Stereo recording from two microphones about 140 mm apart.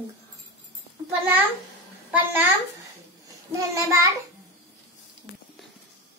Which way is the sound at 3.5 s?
20° right (ahead or behind).